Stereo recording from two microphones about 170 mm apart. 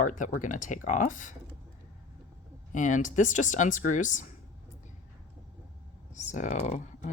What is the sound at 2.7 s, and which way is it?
Speech, 45° left (ahead or behind).